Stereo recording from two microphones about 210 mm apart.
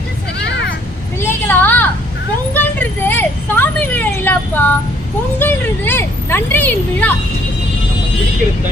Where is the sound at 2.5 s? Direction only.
10° left (ahead or behind).